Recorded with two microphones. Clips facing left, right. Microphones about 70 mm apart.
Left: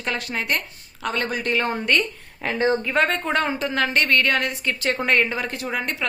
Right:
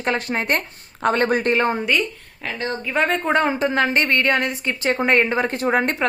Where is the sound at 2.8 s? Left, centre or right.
Centre.